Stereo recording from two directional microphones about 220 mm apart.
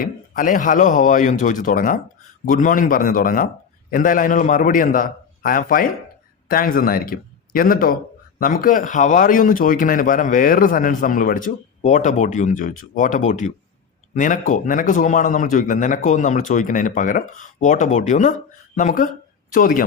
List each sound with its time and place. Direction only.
0.0 s speech: 40° left (ahead or behind)